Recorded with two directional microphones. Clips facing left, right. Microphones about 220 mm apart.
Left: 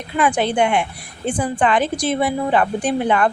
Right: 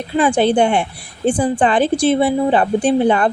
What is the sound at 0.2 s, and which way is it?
A woman's voice, 30° right (ahead or behind).